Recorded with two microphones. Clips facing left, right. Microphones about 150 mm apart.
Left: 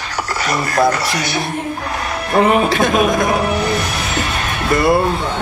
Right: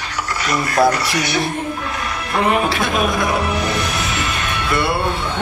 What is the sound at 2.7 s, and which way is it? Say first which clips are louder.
Speech: left 4 dB; 45° left (ahead or behind).